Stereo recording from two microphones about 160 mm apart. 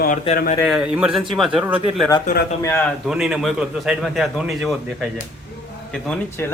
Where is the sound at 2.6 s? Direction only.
15° left (ahead or behind).